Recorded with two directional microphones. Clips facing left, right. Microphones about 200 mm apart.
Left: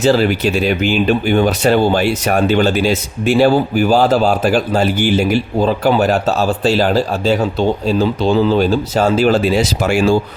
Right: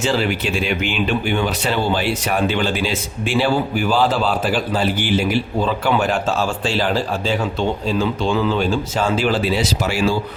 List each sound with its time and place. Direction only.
0.0 s speech: 40° left (ahead or behind)